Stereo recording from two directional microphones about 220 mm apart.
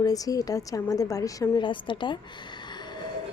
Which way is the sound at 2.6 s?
20° left (ahead or behind).